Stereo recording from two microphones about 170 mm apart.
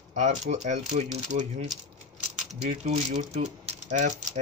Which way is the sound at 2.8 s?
45° right (ahead or behind).